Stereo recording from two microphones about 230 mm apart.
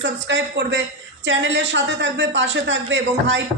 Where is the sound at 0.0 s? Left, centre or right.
Right.